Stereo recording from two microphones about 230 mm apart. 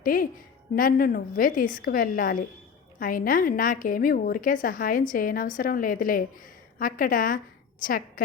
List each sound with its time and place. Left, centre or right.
0.0 s a woman's voice: left